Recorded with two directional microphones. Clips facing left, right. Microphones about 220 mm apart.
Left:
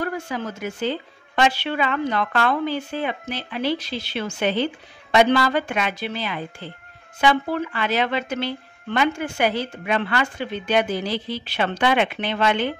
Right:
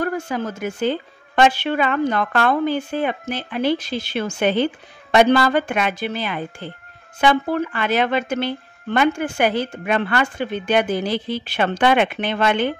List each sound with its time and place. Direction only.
0.0 s speech: 50° right (ahead or behind)